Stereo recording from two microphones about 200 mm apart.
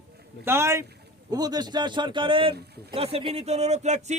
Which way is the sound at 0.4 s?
15° right (ahead or behind).